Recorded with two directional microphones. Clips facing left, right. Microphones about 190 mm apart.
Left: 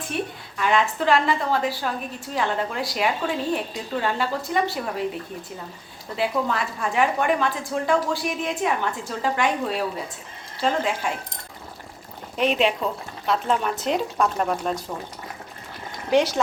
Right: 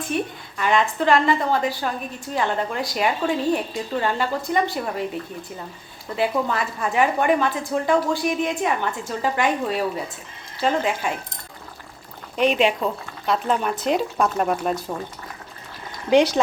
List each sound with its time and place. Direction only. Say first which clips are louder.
0.1 s a woman's voice: right 3 dB; centre (ahead or behind)
6.1 s a woman's voice: right 2 dB; centre (ahead or behind)
12.4 s a woman's voice: right 2 dB; centre (ahead or behind)
16.0 s speech: right 3 dB; 20° right (ahead or behind)